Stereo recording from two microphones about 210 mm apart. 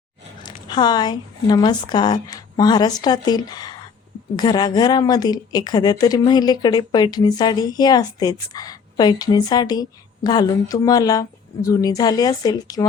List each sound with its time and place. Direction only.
0.7 s speech: 20° left (ahead or behind)